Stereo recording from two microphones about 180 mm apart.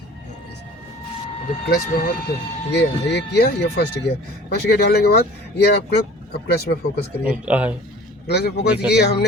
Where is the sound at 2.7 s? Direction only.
70° left (ahead or behind).